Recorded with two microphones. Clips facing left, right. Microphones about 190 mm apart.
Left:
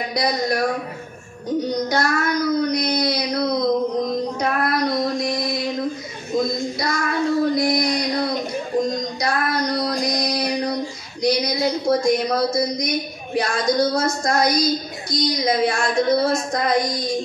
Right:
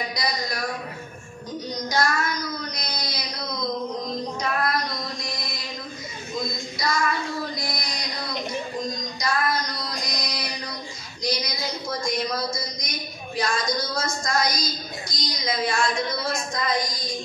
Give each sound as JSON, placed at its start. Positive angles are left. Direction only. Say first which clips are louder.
{"t": 0.1, "sound": "a woman's voice", "louder": "left 8 dB", "side_deg": 60}
{"t": 1.7, "sound": "child singing", "louder": "left 1 dB", "side_deg": 60}
{"t": 4.4, "sound": "a sound", "louder": "left 3 dB", "side_deg": 60}
{"t": 6.3, "sound": "child singing", "louder": "left 10 dB", "side_deg": 60}
{"t": 8.9, "sound": "female singing", "louder": "left 5 dB", "side_deg": 60}
{"t": 10.0, "sound": "a sound", "louder": "left 10 dB", "side_deg": 60}
{"t": 11.2, "sound": "a woman's voice", "louder": "left 9 dB", "side_deg": 60}